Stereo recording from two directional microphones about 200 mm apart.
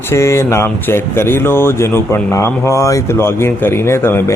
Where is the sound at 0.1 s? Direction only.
15° left (ahead or behind).